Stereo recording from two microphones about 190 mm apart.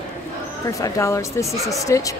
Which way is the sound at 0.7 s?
15° left (ahead or behind).